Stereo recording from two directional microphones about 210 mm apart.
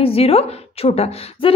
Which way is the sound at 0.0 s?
25° left (ahead or behind).